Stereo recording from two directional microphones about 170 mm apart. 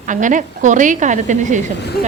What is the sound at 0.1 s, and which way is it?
A woman's voice, 50° right (ahead or behind).